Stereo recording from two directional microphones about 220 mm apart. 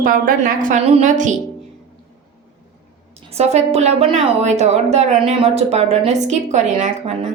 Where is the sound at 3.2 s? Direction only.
30° right (ahead or behind).